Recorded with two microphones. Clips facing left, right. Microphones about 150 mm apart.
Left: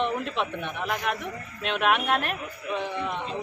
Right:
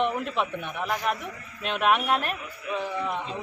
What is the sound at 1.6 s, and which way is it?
Speech, 40° right (ahead or behind).